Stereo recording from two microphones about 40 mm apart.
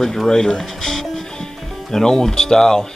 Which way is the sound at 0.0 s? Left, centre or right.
Centre.